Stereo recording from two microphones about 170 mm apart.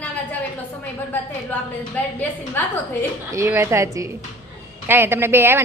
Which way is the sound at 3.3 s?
15° right (ahead or behind).